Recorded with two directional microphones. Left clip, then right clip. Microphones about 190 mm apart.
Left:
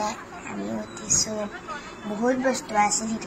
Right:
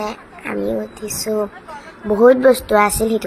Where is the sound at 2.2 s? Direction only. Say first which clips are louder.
Right 13 dB; 30° right (ahead or behind).